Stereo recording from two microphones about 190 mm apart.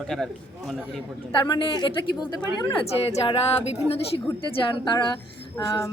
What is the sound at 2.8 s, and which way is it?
Speech, 30° left (ahead or behind).